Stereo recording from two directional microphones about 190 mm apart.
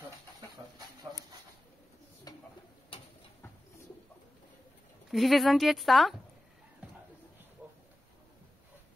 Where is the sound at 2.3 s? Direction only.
20° left (ahead or behind).